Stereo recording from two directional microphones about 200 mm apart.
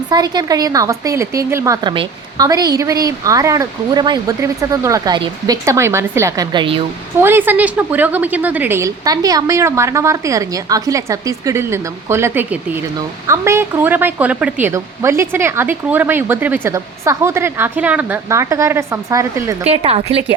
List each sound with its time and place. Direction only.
0.1 s a woman's voice: 20° right (ahead or behind)
7.2 s a woman's voice: 10° right (ahead or behind)
19.6 s a woman's voice: 30° right (ahead or behind)